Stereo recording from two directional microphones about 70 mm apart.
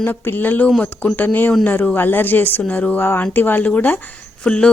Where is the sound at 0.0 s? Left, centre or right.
Left.